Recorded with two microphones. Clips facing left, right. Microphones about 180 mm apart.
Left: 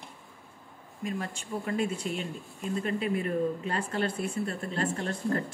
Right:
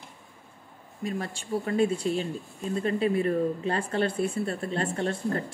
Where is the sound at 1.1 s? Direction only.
35° right (ahead or behind).